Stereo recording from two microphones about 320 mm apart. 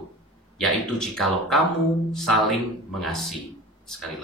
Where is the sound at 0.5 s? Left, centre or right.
Centre.